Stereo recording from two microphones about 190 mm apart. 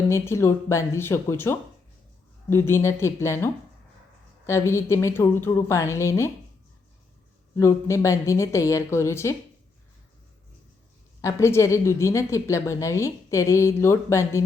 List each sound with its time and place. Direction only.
0.1 s a woman's voice: 15° left (ahead or behind)
7.5 s a woman's voice: 15° left (ahead or behind)
11.2 s a woman's voice: 15° left (ahead or behind)